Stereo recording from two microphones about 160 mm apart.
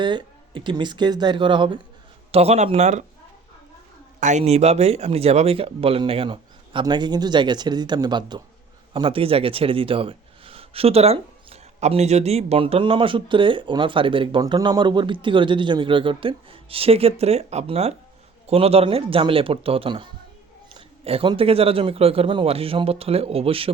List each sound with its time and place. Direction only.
0.0 s a man's voice: 30° right (ahead or behind); by 3.0 s 45° right (ahead or behind)
4.2 s speech: 50° right (ahead or behind)